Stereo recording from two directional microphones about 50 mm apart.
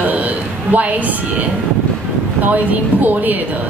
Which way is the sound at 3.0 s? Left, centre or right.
Right.